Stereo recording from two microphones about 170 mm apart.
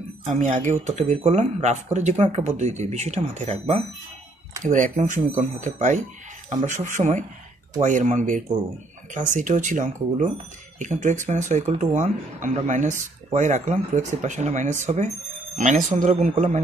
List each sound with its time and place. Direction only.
0.3 s speech: 45° right (ahead or behind)